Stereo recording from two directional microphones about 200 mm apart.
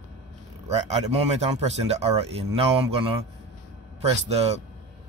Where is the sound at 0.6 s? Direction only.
30° right (ahead or behind).